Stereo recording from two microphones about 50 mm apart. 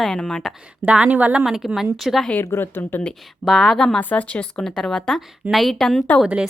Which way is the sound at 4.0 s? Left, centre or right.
Left.